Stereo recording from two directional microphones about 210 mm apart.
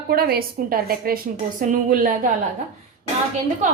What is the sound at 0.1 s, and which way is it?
A woman's voice, 45° right (ahead or behind).